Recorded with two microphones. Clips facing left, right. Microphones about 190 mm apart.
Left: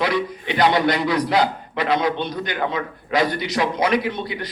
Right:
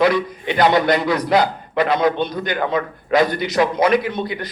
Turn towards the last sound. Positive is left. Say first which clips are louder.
# right 3 dB
turn(degrees=-50)  # may be behind; listen again after turning